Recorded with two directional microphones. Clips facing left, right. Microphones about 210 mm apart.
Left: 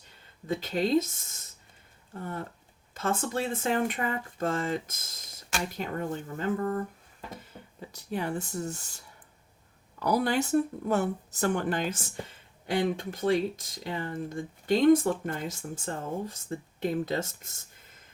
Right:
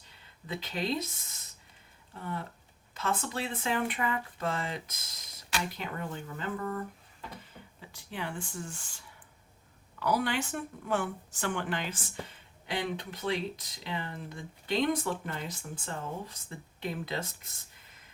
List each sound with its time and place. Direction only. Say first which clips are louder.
0.4 s speech: left 6 dB; 45° left (ahead or behind)
7.8 s speech: left 7 dB; 40° left (ahead or behind)
10.0 s speech: left 4 dB; 40° left (ahead or behind)